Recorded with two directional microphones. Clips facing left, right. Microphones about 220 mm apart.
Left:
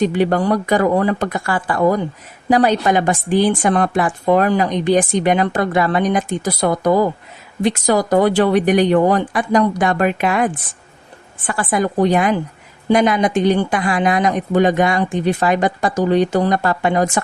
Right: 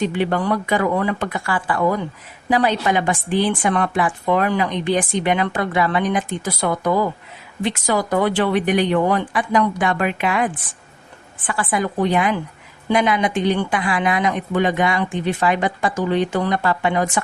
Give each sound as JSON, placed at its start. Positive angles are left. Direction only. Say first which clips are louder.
{"t": 0.0, "sound": "a woman's voice", "louder": "left 4 dB", "side_deg": 40}